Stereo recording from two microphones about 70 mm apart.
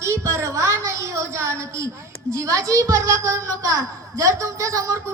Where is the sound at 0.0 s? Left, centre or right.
Right.